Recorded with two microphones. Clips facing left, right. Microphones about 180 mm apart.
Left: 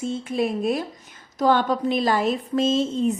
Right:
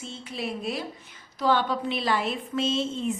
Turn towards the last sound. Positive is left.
turn(degrees=40)  # may be behind; listen again after turning